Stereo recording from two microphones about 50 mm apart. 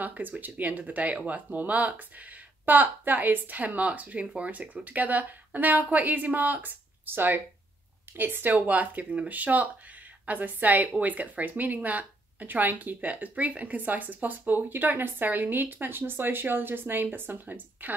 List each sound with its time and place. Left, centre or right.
0.0 s speech: right